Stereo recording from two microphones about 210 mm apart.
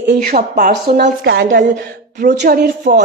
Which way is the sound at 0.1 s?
45° right (ahead or behind).